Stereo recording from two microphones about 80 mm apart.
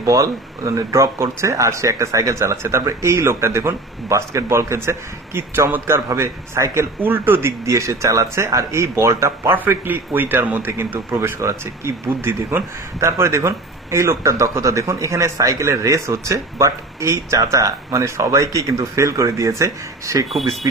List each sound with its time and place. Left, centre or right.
0.0 s speech: right
7.0 s speech: right
9.5 s a man's voice: right
11.1 s speech: right